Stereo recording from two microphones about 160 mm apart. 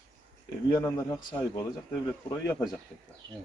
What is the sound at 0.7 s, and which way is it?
Speech, 20° left (ahead or behind).